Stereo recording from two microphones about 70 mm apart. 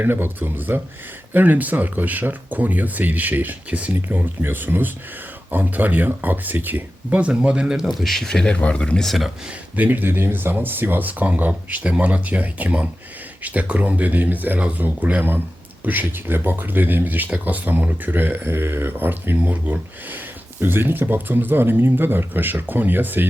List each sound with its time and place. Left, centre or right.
0.0 s speech: right; by 7.9 s centre
7.9 s speech: centre
9.7 s speech: right